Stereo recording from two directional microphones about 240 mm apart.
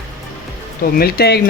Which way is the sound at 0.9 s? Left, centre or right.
Left.